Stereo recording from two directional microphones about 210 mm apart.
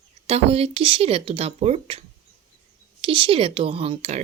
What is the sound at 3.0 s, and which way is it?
Speech, 25° right (ahead or behind).